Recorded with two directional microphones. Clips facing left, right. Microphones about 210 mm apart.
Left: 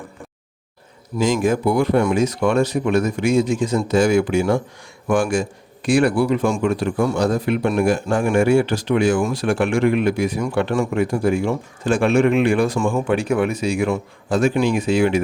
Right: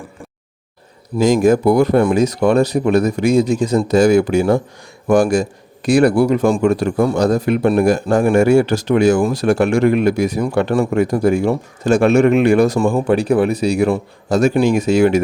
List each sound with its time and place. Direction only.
1.2 s a man's voice: 40° right (ahead or behind)